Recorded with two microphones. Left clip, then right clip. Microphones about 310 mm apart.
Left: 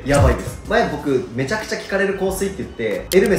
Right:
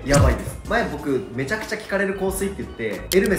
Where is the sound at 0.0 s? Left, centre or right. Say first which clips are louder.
Left 3 dB; centre.